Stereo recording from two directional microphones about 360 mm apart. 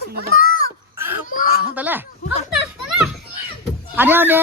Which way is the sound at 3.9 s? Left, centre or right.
Centre.